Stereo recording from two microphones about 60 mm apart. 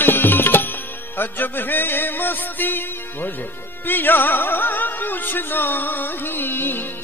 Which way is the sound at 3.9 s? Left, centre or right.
Left.